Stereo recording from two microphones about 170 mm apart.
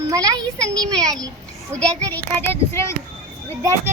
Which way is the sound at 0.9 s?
20° right (ahead or behind).